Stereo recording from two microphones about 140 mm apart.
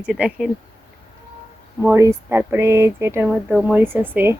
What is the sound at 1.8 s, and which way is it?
Speech, 20° right (ahead or behind).